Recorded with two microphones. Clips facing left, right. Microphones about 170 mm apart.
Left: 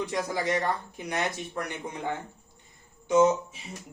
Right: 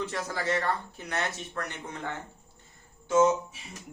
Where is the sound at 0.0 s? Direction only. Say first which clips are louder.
Left 3 dB; 15° left (ahead or behind).